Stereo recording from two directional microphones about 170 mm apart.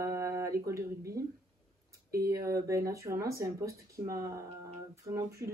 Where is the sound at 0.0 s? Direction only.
15° right (ahead or behind).